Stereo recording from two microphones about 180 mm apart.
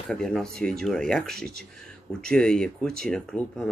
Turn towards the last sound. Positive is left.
turn(degrees=5)  # may be behind; listen again after turning